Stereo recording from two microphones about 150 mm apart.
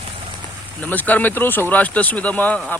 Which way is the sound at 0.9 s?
10° left (ahead or behind).